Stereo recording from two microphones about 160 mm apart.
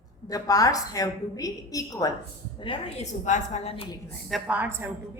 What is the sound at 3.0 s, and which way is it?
Speech, 50° left (ahead or behind).